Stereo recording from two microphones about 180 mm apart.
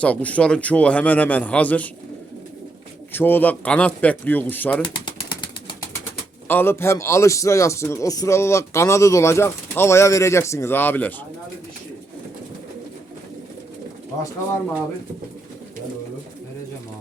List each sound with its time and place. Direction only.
0.0 s speech: 5° left (ahead or behind)
3.1 s speech: 10° left (ahead or behind)
5.0 s pigeon: 25° left (ahead or behind)
6.5 s speech: 10° left (ahead or behind)